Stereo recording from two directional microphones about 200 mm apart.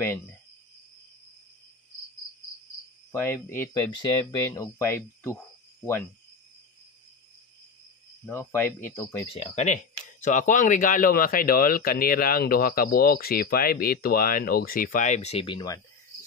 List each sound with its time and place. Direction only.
3.1 s speech: 10° left (ahead or behind)
8.3 s speech: 10° left (ahead or behind)
9.4 s speech: 35° left (ahead or behind)